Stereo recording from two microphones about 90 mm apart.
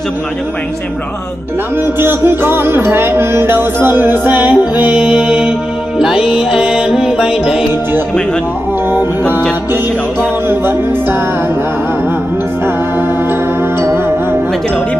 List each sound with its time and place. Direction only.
2.0 s music: 25° right (ahead or behind); by 7.6 s 5° right (ahead or behind)
10.5 s music: 25° right (ahead or behind)
13.7 s music: 25° right (ahead or behind)